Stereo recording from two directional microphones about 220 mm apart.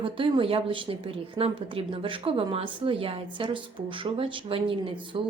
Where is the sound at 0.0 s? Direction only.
25° right (ahead or behind).